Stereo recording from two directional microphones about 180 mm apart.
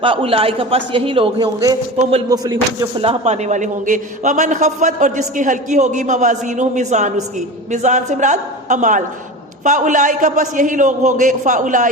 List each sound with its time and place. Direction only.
0.0 s a man's voice: 30° right (ahead or behind)
2.0 s music: 35° right (ahead or behind)
2.3 s a man's voice: 20° right (ahead or behind)
3.0 s a man's voice: 35° right (ahead or behind)